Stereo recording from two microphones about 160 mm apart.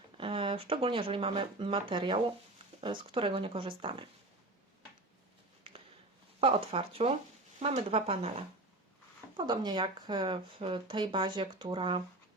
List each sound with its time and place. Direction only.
0.2 s speech: 35° right (ahead or behind)
5.7 s a sound: 35° right (ahead or behind)
6.4 s speech: 35° right (ahead or behind)
9.4 s speech: 25° right (ahead or behind)